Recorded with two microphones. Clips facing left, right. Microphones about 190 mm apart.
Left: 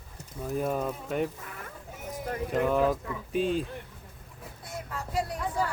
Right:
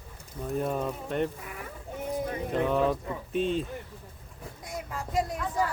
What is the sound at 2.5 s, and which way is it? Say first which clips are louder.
Speech: left 1 dB; 5° left (ahead or behind).